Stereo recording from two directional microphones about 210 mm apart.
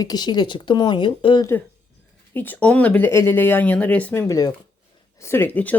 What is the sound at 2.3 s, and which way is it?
Speech, 10° left (ahead or behind).